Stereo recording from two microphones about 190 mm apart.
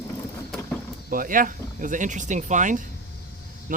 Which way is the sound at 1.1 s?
45° right (ahead or behind).